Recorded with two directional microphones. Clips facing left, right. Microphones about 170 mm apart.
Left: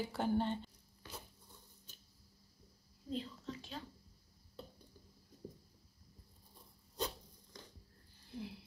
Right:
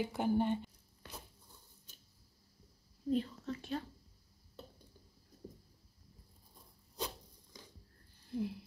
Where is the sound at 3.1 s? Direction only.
55° right (ahead or behind).